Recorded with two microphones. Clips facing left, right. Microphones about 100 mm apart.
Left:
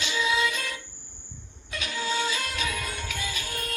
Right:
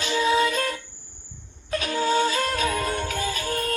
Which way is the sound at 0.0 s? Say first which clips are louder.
Right 5 dB; 45° right (ahead or behind).